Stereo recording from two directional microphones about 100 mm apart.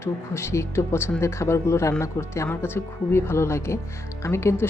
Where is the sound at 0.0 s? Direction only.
25° left (ahead or behind).